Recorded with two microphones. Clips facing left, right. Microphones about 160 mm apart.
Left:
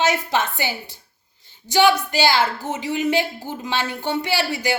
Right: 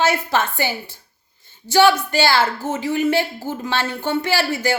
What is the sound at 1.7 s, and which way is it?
Speech, 15° left (ahead or behind).